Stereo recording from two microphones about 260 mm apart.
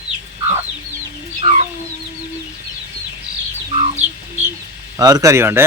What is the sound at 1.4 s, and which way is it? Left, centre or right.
Chicken, right.